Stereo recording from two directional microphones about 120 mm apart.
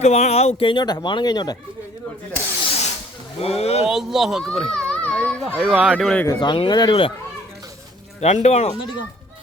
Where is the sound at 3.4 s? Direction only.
60° left (ahead or behind).